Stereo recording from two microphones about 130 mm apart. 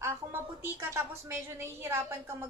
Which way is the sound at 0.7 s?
20° right (ahead or behind).